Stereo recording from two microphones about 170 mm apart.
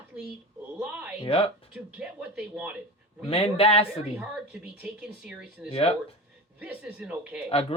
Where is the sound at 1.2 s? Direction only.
35° left (ahead or behind).